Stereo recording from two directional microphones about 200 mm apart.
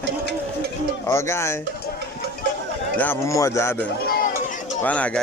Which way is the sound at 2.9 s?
10° left (ahead or behind).